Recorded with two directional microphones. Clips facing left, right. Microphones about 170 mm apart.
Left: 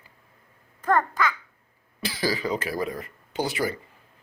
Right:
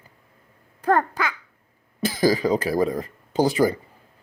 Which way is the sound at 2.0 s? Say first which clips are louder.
Right 7 dB; 45° right (ahead or behind).